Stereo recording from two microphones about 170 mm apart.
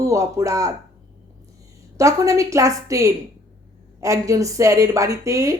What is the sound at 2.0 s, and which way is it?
A woman's voice, 20° right (ahead or behind).